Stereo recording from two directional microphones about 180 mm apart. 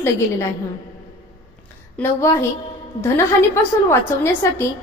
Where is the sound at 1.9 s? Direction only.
15° left (ahead or behind).